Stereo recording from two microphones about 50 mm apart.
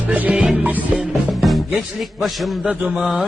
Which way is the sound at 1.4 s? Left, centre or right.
Centre.